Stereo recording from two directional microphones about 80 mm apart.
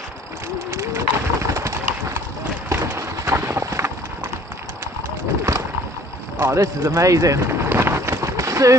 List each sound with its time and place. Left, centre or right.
0.7 s bird: right
2.7 s clip-clop: right
6.4 s a sound: right